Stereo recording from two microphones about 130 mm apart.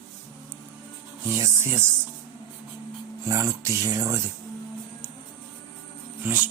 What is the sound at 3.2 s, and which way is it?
Speech, 25° right (ahead or behind).